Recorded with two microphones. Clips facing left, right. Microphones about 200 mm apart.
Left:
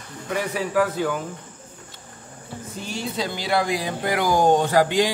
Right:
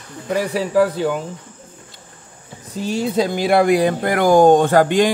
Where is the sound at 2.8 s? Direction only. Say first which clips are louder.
Right 10 dB; 45° right (ahead or behind).